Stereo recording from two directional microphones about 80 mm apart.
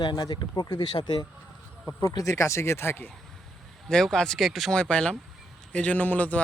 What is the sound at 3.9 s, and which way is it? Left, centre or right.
Speech, centre.